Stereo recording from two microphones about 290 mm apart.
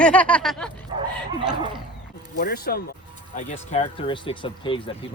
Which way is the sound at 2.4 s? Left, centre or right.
Left.